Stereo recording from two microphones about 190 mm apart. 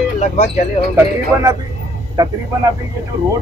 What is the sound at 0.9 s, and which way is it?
Speech, 20° right (ahead or behind).